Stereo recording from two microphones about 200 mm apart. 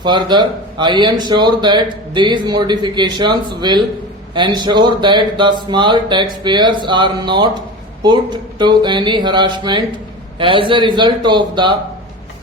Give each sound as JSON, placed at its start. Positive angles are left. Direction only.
{"t": 0.0, "sound": "speech", "side_deg": -20}